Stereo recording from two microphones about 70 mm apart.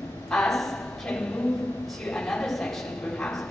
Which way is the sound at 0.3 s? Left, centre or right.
Centre.